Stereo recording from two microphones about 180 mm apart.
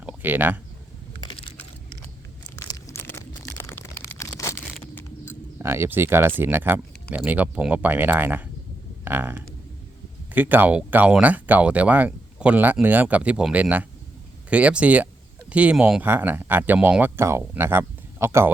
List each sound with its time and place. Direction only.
0.0 s speech: 10° right (ahead or behind)
1.2 s crushing: 25° left (ahead or behind)
2.6 s a sound: 20° left (ahead or behind)
5.5 s speech: 15° right (ahead or behind)